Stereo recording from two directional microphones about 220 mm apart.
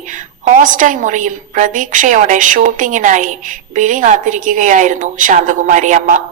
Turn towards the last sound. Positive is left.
turn(degrees=-35)  # may be behind; listen again after turning